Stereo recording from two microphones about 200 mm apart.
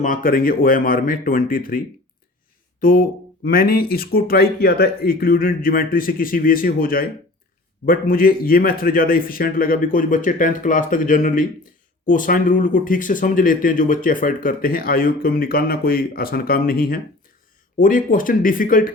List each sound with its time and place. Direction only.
0.0 s speech: 45° left (ahead or behind)
2.8 s speech: 45° left (ahead or behind)